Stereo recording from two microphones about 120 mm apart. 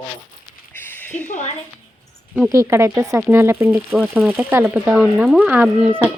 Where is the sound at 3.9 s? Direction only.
5° right (ahead or behind).